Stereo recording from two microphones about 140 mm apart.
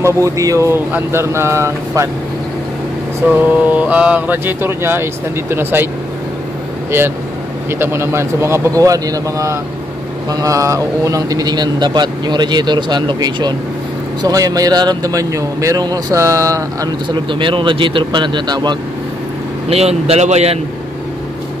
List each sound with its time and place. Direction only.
0.0 s speech: 25° right (ahead or behind)
3.2 s speech: 15° right (ahead or behind)
7.8 s speech: 20° right (ahead or behind)
19.7 s speech: 45° right (ahead or behind)